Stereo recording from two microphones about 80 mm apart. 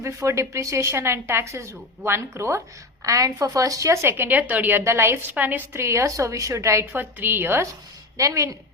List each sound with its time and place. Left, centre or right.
0.0 s a woman's voice: right
4.3 s a woman's voice: right
6.9 s a woman's voice: right
8.2 s speech: right